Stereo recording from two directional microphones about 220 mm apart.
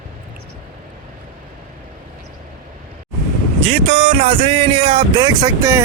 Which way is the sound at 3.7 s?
25° right (ahead or behind).